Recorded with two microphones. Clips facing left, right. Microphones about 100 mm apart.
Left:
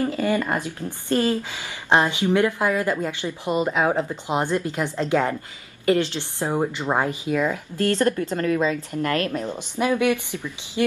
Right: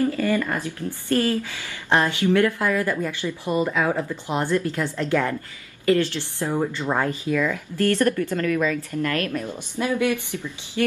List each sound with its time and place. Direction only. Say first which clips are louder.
0.0 s a woman's voice: right 1 dB; 20° left (ahead or behind)